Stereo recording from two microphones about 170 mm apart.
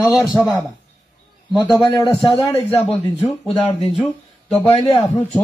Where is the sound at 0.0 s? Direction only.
20° left (ahead or behind).